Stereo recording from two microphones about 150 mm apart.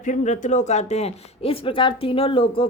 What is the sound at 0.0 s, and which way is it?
Speech, 55° left (ahead or behind).